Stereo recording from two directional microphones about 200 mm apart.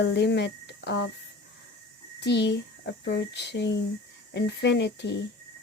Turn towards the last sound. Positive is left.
turn(degrees=60)  # may be behind; listen again after turning